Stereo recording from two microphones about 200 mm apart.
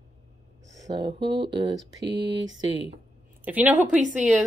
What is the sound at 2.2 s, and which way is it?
Speech, 65° right (ahead or behind).